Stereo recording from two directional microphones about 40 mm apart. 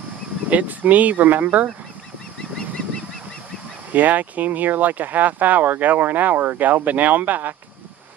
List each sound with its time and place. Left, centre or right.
0.5 s speech: right
3.9 s speech: right
6.6 s speech: right